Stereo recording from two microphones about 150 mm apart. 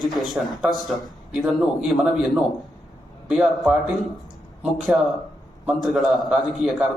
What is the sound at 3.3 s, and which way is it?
A man's voice, 5° right (ahead or behind).